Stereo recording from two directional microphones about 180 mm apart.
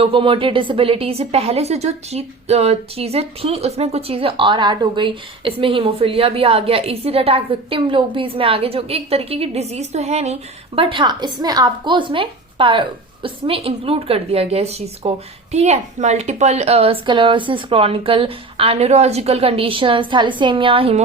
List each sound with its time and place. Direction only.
0.0 s a woman's voice: 30° right (ahead or behind)